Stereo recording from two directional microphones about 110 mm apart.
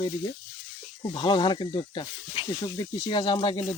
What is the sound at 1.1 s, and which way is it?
Speech, 45° left (ahead or behind).